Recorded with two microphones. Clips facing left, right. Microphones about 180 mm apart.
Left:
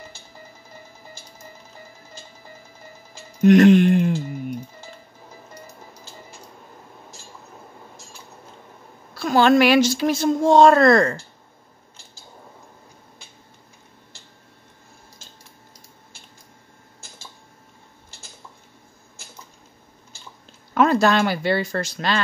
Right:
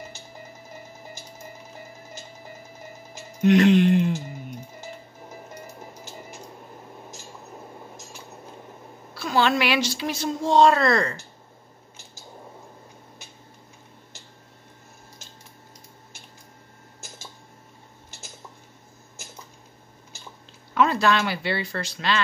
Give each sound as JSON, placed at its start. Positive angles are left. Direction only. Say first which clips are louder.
{"t": 3.4, "sound": "speech", "louder": "left 4 dB", "side_deg": 50}
{"t": 9.1, "sound": "speech", "louder": "left 6 dB", "side_deg": 45}
{"t": 20.7, "sound": "speech", "louder": "left 4 dB", "side_deg": 45}